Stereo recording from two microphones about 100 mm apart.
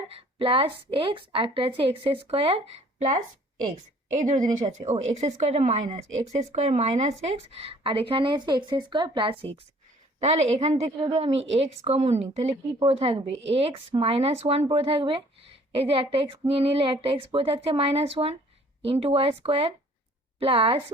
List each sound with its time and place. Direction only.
0.1 s a woman's voice: 70° right (ahead or behind)
4.6 s speech: 90° right; by 9.5 s 60° right (ahead or behind)
10.2 s speech: 90° right
12.9 s a woman's voice: 75° right (ahead or behind); by 18.3 s 90° right
18.8 s a woman's voice: 75° right (ahead or behind)